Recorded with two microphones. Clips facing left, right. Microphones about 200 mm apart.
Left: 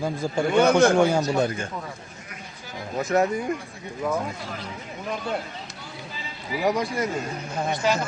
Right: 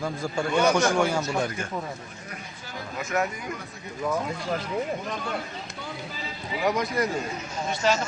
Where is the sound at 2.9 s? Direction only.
35° left (ahead or behind).